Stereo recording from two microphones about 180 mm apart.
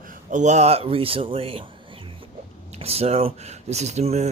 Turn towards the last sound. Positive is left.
turn(degrees=-40)  # may be behind; listen again after turning